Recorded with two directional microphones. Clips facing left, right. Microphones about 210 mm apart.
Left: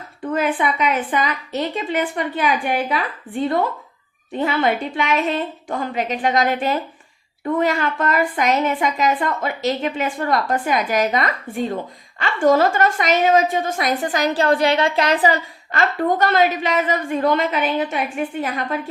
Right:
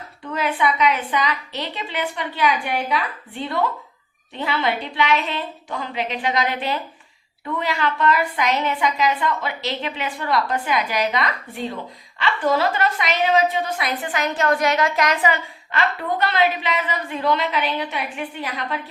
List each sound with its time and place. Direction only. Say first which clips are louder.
0.2 s a woman's voice: left 3 dB; 50° left (ahead or behind)